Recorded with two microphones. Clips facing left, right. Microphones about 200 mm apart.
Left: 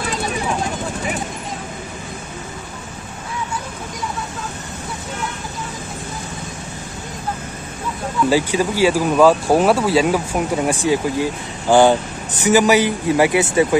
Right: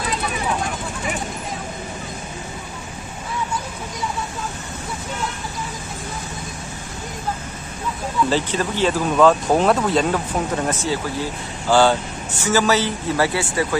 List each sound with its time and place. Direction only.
8.3 s speech: 10° left (ahead or behind)